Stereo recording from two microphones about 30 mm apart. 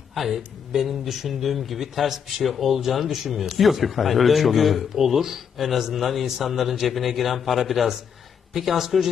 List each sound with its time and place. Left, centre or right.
0.1 s a woman's voice: centre